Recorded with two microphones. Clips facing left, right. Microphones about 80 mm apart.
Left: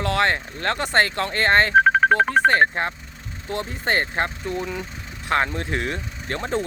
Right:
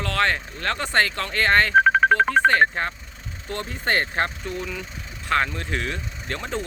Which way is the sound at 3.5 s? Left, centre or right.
Centre.